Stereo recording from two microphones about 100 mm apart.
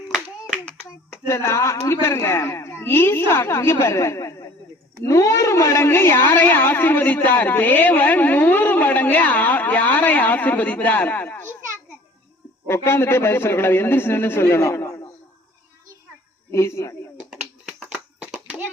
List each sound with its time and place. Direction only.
1.3 s a woman's voice: 30° left (ahead or behind)
12.6 s speech: 25° left (ahead or behind)
16.5 s speech: 30° left (ahead or behind)
17.7 s a sound: centre (ahead or behind)